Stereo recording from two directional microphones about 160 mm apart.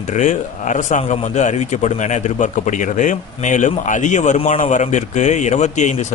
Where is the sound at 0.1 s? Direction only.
50° left (ahead or behind).